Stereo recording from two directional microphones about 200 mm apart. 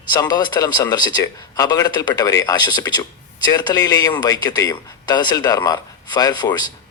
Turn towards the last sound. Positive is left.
turn(degrees=20)  # may be behind; listen again after turning